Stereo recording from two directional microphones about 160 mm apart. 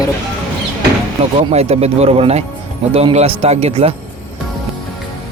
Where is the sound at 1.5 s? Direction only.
40° right (ahead or behind).